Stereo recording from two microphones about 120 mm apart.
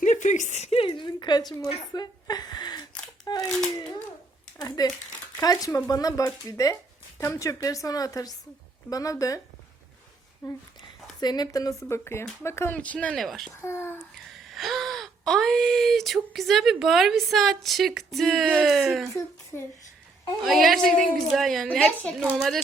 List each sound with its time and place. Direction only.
0.0 s a sound: 90° left; by 0.8 s 70° left (ahead or behind)
0.8 s a sound: 40° left (ahead or behind)
1.9 s a woman's voice: 35° left (ahead or behind)
4.6 s a woman's voice: 35° left (ahead or behind)
10.4 s a woman's voice: 35° left (ahead or behind)
11.8 s speech: 20° left (ahead or behind)
13.2 s speech: centre (ahead or behind)
13.6 s speech: 20° left (ahead or behind)
14.3 s speech: centre (ahead or behind)
19.5 s speech: 20° left (ahead or behind)
20.4 s speech: centre (ahead or behind)